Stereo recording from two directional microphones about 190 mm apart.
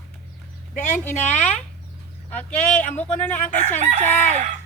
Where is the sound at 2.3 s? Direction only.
10° left (ahead or behind).